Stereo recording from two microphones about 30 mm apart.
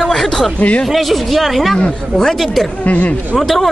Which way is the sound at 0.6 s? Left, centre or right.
Left.